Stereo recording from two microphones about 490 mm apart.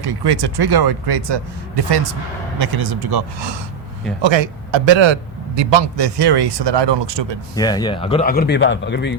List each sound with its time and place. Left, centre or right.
0.0 s speech: right
4.2 s speech: right
7.5 s speech: centre